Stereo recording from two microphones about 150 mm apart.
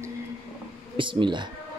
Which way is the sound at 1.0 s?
35° right (ahead or behind).